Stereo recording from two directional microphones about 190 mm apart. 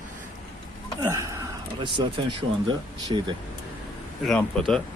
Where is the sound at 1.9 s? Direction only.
25° right (ahead or behind).